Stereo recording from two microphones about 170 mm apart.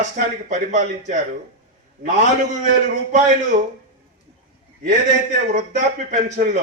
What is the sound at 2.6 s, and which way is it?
Speech, 50° right (ahead or behind).